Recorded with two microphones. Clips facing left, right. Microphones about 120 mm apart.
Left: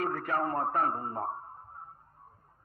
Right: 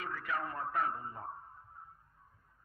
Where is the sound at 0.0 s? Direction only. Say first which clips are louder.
Left 8 dB; 50° left (ahead or behind).